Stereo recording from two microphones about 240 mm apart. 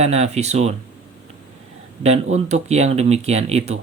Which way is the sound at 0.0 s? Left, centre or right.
Right.